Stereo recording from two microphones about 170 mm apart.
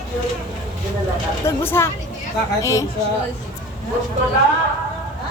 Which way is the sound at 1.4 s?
15° left (ahead or behind).